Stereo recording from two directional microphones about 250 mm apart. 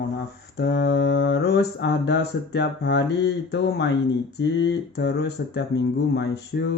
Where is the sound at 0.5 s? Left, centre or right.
Left.